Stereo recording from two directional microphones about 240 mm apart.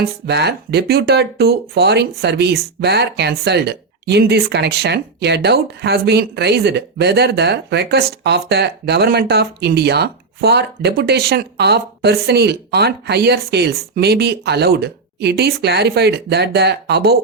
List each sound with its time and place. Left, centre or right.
0.0 s speech: right